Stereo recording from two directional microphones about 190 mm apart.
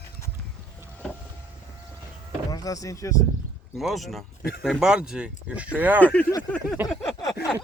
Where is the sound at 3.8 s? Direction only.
Centre (ahead or behind).